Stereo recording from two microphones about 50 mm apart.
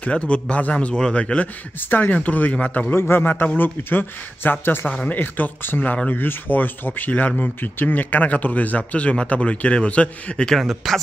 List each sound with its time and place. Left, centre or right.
0.0 s speech: left
1.8 s speech: left
2.9 s speech: left; by 10.6 s centre
10.6 s speech: centre